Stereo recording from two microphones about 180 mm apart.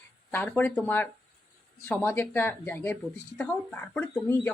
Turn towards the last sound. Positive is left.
turn(degrees=10)  # may be behind; listen again after turning